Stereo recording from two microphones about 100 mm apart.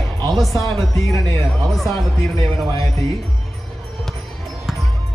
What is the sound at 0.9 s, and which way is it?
Speech, 35° left (ahead or behind).